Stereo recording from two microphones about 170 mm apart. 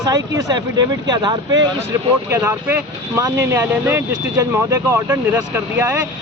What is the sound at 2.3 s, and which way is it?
Speech, 15° right (ahead or behind).